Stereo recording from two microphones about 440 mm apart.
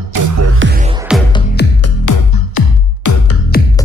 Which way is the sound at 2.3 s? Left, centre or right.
Left.